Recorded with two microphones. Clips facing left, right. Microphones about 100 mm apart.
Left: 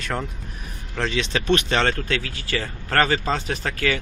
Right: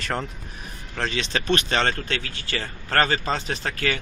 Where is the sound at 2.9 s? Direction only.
5° left (ahead or behind).